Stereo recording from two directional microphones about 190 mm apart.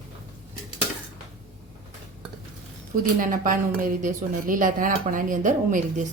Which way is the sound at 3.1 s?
45° right (ahead or behind).